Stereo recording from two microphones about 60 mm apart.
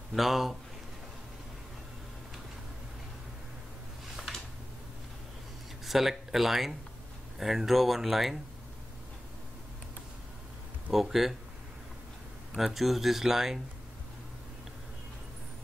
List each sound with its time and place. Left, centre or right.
0.1 s speech: centre
5.9 s speech: centre
10.9 s speech: centre
12.5 s speech: centre